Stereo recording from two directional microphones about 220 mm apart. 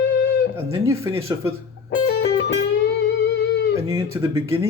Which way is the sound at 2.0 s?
50° left (ahead or behind).